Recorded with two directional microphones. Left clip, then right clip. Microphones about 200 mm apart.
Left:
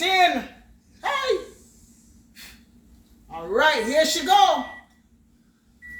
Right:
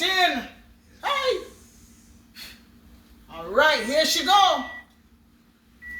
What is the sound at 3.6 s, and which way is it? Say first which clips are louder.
Speech: even; 15° right (ahead or behind).